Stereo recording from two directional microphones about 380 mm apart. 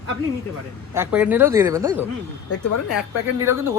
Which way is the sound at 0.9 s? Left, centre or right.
Centre.